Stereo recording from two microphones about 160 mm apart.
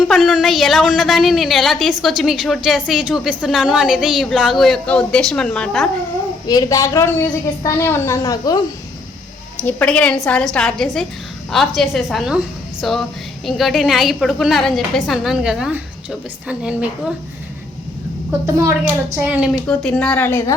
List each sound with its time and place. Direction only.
0.1 s a woman's voice: centre (ahead or behind)
6.5 s a woman's voice: 25° left (ahead or behind)
9.6 s a woman's voice: 10° left (ahead or behind); by 16.9 s 10° right (ahead or behind)
19.1 s speech: 10° right (ahead or behind)
19.6 s a woman's voice: 5° left (ahead or behind)